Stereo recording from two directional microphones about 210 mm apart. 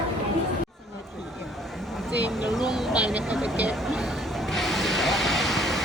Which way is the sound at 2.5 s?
20° left (ahead or behind).